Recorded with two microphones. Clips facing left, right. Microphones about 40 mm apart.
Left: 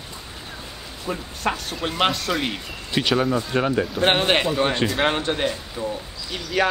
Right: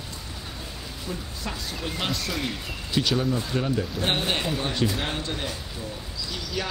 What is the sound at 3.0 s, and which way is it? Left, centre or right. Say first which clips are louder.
Speech: left 4 dB; left.